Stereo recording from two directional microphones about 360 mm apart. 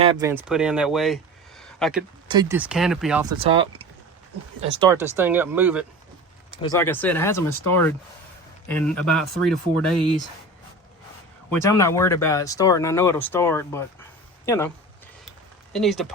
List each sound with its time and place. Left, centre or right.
0.0 s speech: centre
2.2 s speech: centre
3.3 s speech: centre
4.8 s speech: centre
6.6 s speech: centre
11.5 s speech: centre
15.7 s speech: centre